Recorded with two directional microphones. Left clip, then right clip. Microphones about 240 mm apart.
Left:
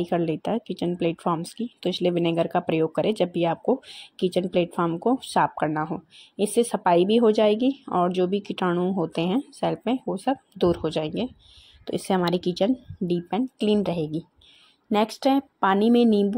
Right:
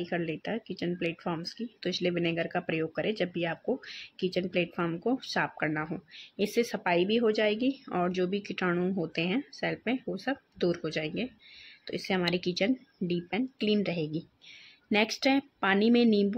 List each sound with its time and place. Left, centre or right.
0.0 s speech: centre